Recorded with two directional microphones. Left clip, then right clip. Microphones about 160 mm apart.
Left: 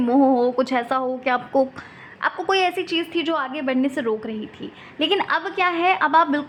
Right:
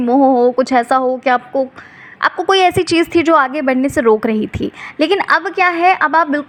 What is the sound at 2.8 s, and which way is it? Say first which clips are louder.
Speech: right 10 dB; 40° right (ahead or behind).